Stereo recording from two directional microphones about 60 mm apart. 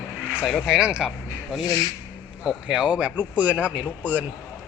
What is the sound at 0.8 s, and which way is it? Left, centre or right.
Speech, centre.